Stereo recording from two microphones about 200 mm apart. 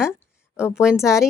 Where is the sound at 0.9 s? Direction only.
15° left (ahead or behind).